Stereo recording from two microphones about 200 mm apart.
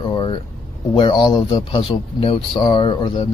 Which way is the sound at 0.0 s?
20° left (ahead or behind).